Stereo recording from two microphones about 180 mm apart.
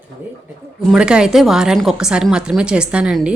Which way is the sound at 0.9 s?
5° right (ahead or behind).